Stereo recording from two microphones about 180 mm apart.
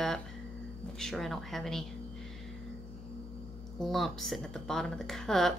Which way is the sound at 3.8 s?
Centre (ahead or behind).